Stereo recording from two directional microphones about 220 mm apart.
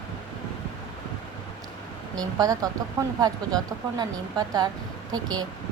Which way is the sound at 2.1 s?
15° right (ahead or behind).